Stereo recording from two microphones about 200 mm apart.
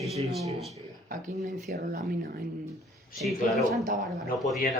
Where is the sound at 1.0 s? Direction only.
40° right (ahead or behind).